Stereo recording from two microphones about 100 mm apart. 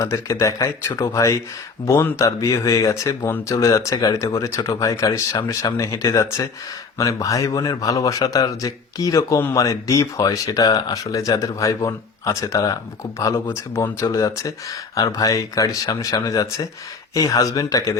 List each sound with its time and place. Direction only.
0.1 s a man's voice: 35° left (ahead or behind)